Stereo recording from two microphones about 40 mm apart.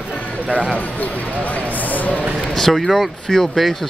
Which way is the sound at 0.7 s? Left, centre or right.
Left.